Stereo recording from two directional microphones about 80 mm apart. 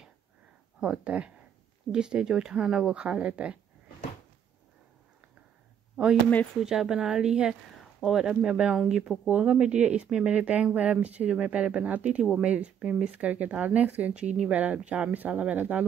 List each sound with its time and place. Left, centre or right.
0.7 s speech: centre
6.6 s speech: centre